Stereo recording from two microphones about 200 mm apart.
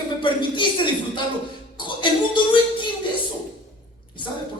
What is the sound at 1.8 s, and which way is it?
Speech, 25° left (ahead or behind).